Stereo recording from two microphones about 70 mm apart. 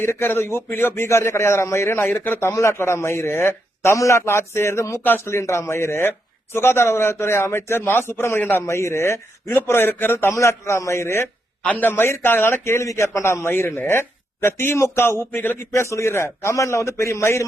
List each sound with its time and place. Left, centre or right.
0.0 s a man's voice: left
8.6 s a man's voice: left
11.6 s a man's voice: left
15.7 s a man's voice: left